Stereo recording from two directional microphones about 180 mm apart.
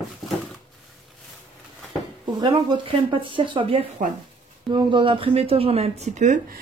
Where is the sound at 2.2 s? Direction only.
25° right (ahead or behind); by 6.4 s 40° right (ahead or behind).